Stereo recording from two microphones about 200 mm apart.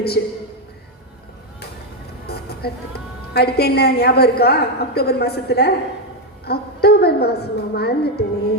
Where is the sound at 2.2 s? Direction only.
50° left (ahead or behind).